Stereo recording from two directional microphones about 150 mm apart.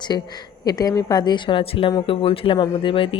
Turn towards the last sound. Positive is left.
turn(degrees=35)  # may be behind; listen again after turning